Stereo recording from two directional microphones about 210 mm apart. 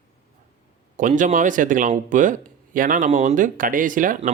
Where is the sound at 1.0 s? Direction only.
35° right (ahead or behind).